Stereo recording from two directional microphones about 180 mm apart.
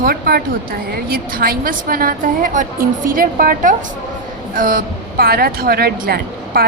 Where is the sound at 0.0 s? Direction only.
55° right (ahead or behind).